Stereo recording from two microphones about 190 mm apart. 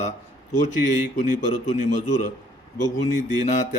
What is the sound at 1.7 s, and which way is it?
Speech, 40° left (ahead or behind).